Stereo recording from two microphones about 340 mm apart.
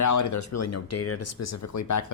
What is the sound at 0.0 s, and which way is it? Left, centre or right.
Speech, left.